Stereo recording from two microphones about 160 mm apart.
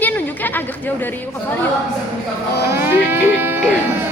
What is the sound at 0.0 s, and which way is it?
Chatter, 10° left (ahead or behind).